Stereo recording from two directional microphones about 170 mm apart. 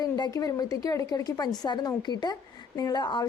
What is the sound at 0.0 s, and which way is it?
A woman's voice, 20° left (ahead or behind).